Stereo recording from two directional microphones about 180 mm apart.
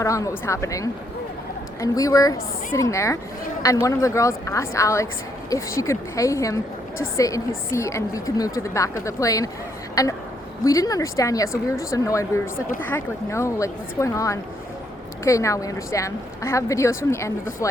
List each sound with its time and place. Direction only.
0.0 s a woman's voice: 15° left (ahead or behind)